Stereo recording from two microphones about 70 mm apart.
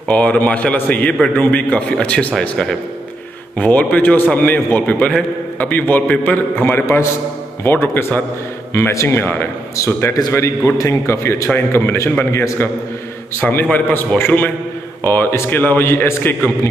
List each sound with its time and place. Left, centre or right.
0.1 s a man's voice: centre
5.6 s a man's voice: left
6.6 s a man's voice: left
10.3 s a man's voice: left